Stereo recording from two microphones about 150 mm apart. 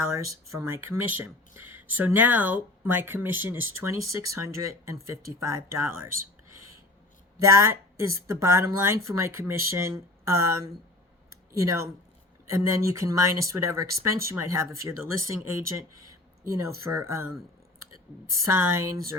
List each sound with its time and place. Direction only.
0.6 s speech: 15° right (ahead or behind)
7.3 s speech: 20° right (ahead or behind)
18.4 s speech: 15° right (ahead or behind)